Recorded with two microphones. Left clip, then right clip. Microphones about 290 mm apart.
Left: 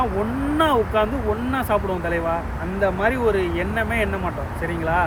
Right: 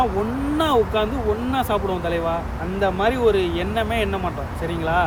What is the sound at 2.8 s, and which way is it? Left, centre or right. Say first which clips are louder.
Speech: right 1 dB; centre.